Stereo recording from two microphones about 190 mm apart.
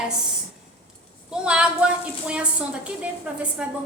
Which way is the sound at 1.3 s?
5° right (ahead or behind).